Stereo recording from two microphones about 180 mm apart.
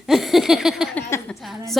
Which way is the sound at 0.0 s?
Centre (ahead or behind).